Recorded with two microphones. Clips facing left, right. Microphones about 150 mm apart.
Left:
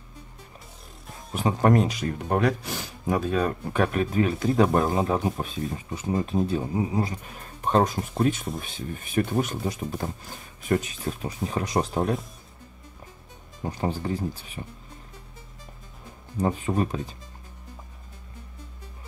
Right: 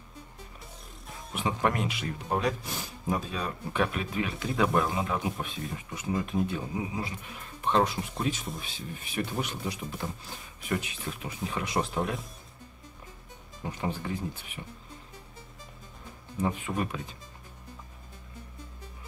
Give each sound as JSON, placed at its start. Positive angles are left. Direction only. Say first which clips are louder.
{"t": 1.3, "sound": "speech", "louder": "left 7 dB", "side_deg": 40}
{"t": 2.2, "sound": "speech", "louder": "left 5 dB", "side_deg": 65}
{"t": 13.7, "sound": "speech", "louder": "left 5 dB", "side_deg": 35}
{"t": 16.3, "sound": "speech", "louder": "left 5 dB", "side_deg": 40}